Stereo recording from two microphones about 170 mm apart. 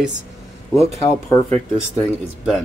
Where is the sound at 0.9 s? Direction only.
20° left (ahead or behind).